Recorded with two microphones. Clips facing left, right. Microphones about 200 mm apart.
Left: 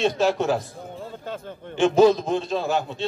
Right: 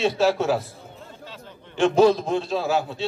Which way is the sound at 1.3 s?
50° left (ahead or behind).